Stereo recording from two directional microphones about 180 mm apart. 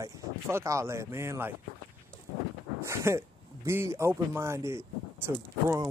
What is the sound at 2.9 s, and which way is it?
Speech, 15° right (ahead or behind).